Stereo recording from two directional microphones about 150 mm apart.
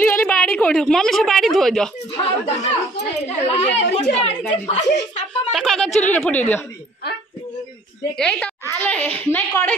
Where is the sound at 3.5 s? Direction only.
45° left (ahead or behind).